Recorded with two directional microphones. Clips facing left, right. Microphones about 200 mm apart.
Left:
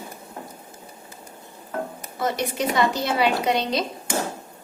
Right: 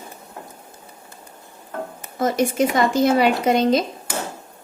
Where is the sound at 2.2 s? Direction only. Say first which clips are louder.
Right 6 dB; 50° right (ahead or behind).